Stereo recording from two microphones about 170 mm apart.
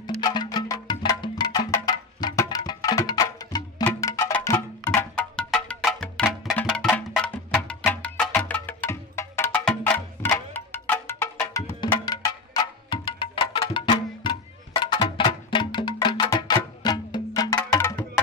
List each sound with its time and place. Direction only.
0.2 s music: 25° left (ahead or behind)